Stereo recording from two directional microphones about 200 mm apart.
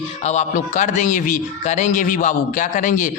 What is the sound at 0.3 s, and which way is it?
A man's voice, 35° left (ahead or behind).